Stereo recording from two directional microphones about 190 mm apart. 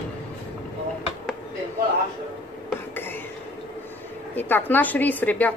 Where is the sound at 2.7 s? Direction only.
10° left (ahead or behind).